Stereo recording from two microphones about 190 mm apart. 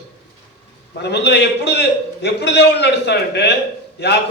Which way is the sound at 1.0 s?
60° left (ahead or behind).